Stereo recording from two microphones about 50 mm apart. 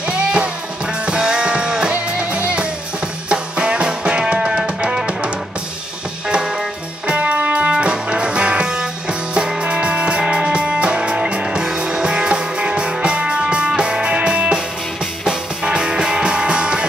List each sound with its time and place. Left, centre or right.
0.1 s music: right
7.2 s music: right